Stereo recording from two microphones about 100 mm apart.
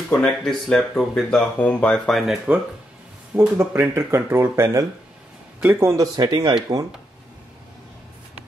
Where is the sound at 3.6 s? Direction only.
25° right (ahead or behind).